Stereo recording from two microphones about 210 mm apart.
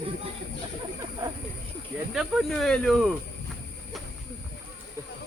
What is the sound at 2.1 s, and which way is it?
Speech, centre (ahead or behind).